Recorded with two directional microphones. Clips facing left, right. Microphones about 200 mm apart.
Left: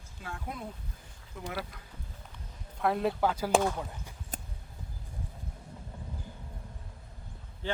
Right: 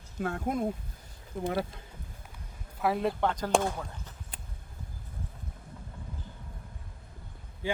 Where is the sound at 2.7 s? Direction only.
Centre (ahead or behind).